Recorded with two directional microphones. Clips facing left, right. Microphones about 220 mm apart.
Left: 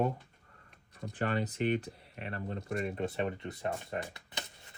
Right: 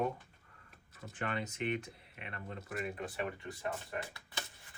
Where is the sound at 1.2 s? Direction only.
35° left (ahead or behind).